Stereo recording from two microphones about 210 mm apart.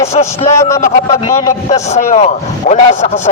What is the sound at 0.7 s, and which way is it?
A man's voice, 35° left (ahead or behind).